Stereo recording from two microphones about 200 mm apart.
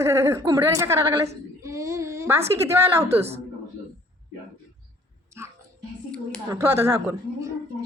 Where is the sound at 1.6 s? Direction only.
15° right (ahead or behind).